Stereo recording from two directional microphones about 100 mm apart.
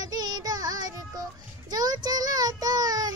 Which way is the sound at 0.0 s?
40° right (ahead or behind).